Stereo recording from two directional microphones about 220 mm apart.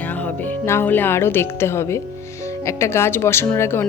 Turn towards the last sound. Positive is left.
turn(degrees=10)  # may be behind; listen again after turning